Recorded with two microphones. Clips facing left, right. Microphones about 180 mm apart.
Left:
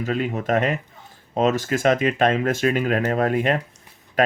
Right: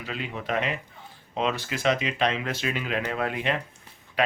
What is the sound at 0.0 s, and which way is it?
Speech, 45° left (ahead or behind).